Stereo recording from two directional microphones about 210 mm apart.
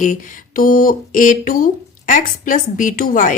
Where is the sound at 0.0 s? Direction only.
40° left (ahead or behind).